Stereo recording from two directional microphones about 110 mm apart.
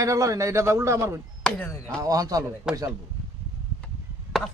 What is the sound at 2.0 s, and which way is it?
Speech, 35° right (ahead or behind).